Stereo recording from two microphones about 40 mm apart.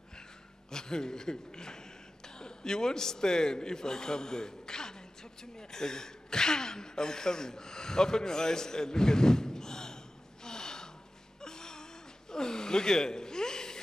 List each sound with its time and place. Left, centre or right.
0.7 s speech: centre
10.4 s gasp: centre